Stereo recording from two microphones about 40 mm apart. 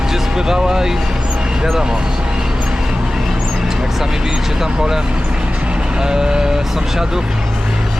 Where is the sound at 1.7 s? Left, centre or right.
Centre.